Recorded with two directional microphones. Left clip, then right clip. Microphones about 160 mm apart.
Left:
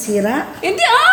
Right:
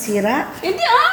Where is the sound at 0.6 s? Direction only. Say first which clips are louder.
Left 4 dB; 40° left (ahead or behind).